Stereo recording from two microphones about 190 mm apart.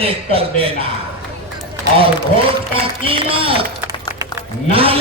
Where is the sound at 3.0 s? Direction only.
30° right (ahead or behind).